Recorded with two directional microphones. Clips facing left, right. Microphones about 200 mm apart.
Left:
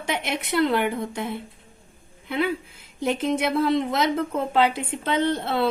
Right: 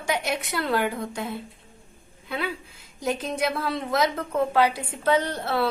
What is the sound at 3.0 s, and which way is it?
A woman's voice, 25° left (ahead or behind).